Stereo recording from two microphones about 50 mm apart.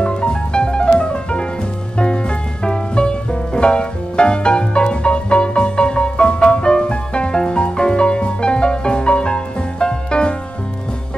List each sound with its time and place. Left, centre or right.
0.0 s music: centre
2.6 s music: centre